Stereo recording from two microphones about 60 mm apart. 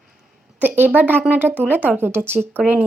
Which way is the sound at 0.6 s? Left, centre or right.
Right.